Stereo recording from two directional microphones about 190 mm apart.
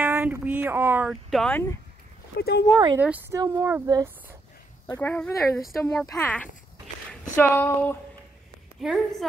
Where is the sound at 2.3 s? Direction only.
60° left (ahead or behind).